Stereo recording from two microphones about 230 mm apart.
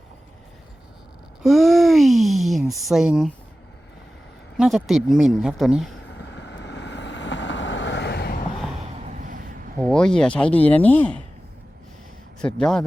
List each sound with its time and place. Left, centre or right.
1.4 s a sound: centre
4.5 s speech: centre
6.2 s vehicle: left
9.0 s vehicle: right
9.9 s speech: centre
12.4 s speech: centre